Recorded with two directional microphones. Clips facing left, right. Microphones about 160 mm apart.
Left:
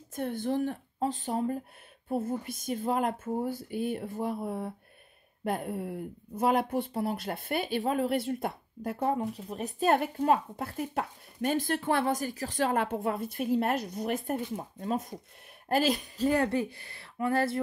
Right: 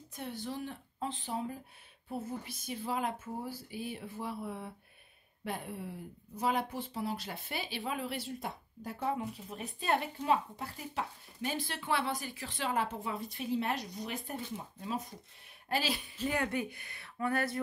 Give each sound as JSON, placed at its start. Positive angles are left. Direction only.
{"t": 0.1, "sound": "a woman's voice", "side_deg": 50}